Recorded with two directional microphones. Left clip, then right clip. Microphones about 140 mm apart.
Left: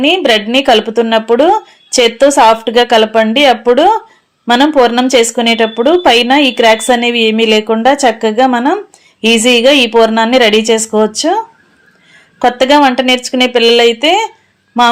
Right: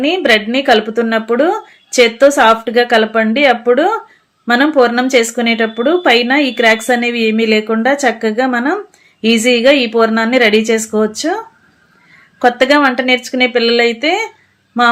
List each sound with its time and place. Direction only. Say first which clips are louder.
0.0 s a woman's voice: left 2 dB; 20° left (ahead or behind)